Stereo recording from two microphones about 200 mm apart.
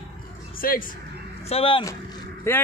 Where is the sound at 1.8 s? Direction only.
20° left (ahead or behind).